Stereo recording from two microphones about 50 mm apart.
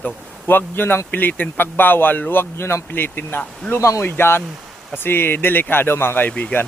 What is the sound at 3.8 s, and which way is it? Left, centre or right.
Speech, left.